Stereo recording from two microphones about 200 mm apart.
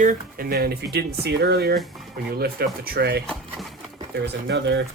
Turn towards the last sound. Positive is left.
turn(degrees=-55)  # may be behind; listen again after turning